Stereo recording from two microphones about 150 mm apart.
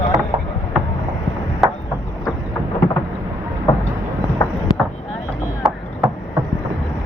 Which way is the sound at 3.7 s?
20° left (ahead or behind).